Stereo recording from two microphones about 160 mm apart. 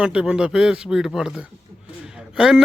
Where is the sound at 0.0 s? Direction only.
5° right (ahead or behind).